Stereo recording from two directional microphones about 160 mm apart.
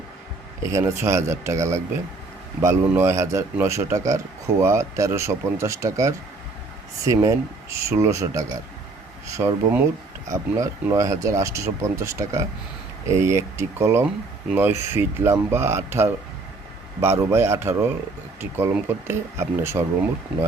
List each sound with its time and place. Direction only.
0.7 s speech: 20° right (ahead or behind)